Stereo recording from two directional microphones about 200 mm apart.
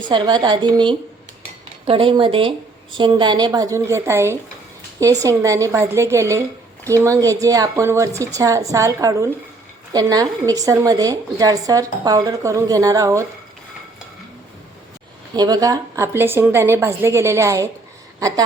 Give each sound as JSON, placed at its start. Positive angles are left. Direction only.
{"t": 0.1, "sound": "a woman's voice", "side_deg": -20}
{"t": 15.4, "sound": "a woman's voice", "side_deg": -20}
{"t": 18.2, "sound": "a sound", "side_deg": -15}